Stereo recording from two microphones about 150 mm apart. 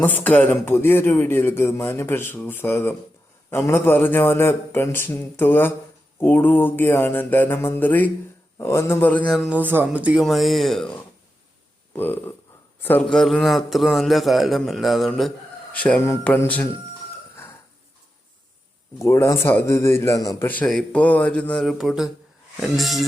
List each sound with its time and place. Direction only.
0.0 s a man's voice: 10° left (ahead or behind)
9.5 s a man's voice: 10° right (ahead or behind)
11.9 s a man's voice: 15° left (ahead or behind)
13.1 s a man's voice: centre (ahead or behind)
18.9 s a man's voice: 20° left (ahead or behind)
20.5 s a man's voice: 5° left (ahead or behind)